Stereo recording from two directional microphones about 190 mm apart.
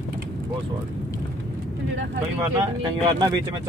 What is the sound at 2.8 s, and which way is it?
Speech, 20° right (ahead or behind).